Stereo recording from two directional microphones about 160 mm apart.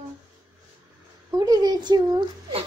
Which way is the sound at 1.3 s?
25° right (ahead or behind).